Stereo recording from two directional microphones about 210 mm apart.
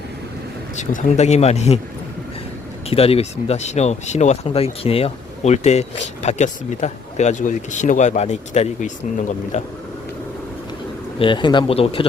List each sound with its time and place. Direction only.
0.8 s speech: 35° left (ahead or behind)
2.9 s speech: 30° left (ahead or behind)
11.2 s speech: 20° left (ahead or behind)